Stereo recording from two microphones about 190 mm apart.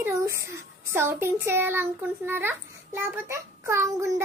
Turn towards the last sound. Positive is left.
turn(degrees=-15)  # may be behind; listen again after turning